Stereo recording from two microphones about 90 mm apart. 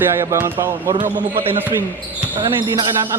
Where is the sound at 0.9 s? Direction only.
80° right.